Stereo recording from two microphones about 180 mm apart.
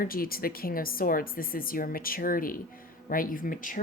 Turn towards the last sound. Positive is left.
turn(degrees=50)  # may be behind; listen again after turning